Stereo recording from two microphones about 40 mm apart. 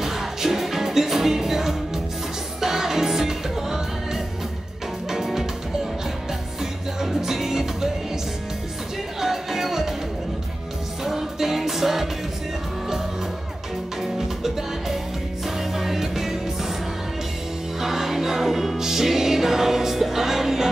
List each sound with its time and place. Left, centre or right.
0.0 s music: centre
6.6 s music: centre
9.2 s music: centre
11.1 s music: centre
14.0 s music: centre
17.7 s music: centre